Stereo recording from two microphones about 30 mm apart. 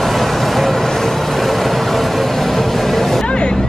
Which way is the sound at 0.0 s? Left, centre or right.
Centre.